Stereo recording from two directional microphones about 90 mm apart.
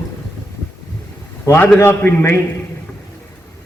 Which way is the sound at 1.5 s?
20° left (ahead or behind).